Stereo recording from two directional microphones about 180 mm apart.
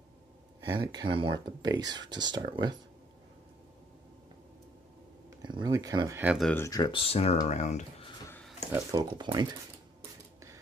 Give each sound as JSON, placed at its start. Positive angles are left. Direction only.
{"t": 0.7, "sound": "speech", "side_deg": -25}
{"t": 5.4, "sound": "speech", "side_deg": -25}
{"t": 6.5, "sound": "speech", "side_deg": 15}
{"t": 8.7, "sound": "speech", "side_deg": -25}